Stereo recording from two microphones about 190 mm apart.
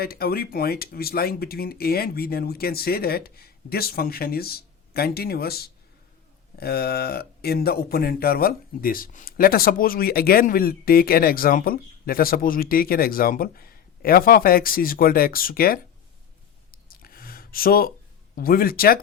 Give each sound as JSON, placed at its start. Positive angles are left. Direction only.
{"t": 0.0, "sound": "speech", "side_deg": 55}
{"t": 16.7, "sound": "a sound", "side_deg": 50}
{"t": 18.3, "sound": "speech", "side_deg": 50}